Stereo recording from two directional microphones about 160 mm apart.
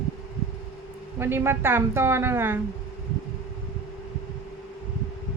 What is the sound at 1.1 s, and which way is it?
Speech, 15° right (ahead or behind).